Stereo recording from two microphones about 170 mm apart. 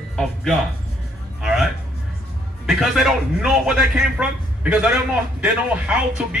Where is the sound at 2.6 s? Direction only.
Centre (ahead or behind).